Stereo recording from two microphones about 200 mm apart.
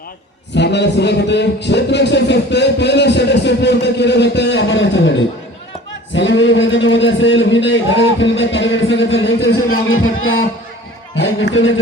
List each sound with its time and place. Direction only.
0.5 s a man's voice: 60° left (ahead or behind); by 10.2 s 90° left
11.2 s a man's voice: 65° left (ahead or behind)